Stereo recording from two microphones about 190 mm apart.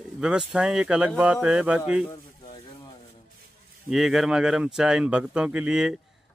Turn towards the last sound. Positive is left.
turn(degrees=-5)  # may be behind; listen again after turning